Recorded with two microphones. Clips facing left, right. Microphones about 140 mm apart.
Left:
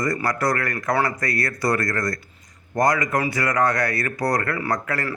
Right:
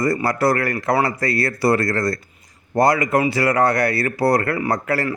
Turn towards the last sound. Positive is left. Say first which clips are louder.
# right 4 dB
turn(degrees=-30)  # may be behind; listen again after turning